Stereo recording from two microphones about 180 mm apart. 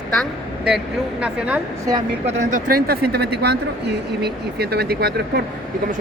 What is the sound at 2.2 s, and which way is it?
Speech, 45° right (ahead or behind).